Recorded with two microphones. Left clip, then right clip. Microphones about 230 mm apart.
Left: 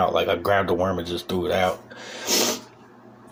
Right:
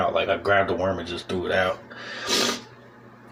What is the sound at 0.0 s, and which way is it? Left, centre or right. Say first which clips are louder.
Speech: left 2 dB; left.